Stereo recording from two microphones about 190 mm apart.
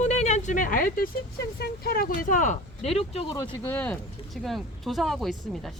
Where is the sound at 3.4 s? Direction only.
10° left (ahead or behind).